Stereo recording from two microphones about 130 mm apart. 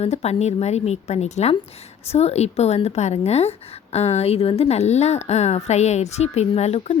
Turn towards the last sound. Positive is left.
turn(degrees=55)  # may be behind; listen again after turning